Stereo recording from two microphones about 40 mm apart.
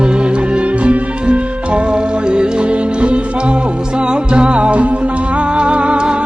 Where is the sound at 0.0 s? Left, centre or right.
Right.